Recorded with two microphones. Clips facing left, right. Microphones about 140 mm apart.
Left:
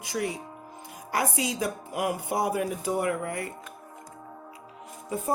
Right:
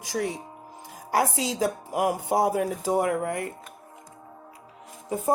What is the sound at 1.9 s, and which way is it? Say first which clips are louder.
Music: right 3 dB; 45° right (ahead or behind).